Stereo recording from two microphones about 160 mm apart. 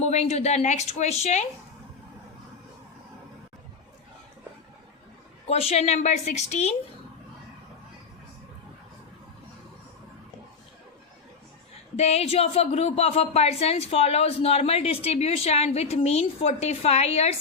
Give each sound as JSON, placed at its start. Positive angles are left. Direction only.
{"t": 0.0, "sound": "speech", "side_deg": 45}
{"t": 5.5, "sound": "speech", "side_deg": 40}
{"t": 11.9, "sound": "speech", "side_deg": 40}